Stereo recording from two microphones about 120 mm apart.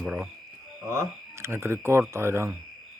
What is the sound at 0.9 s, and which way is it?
Speech, 20° right (ahead or behind).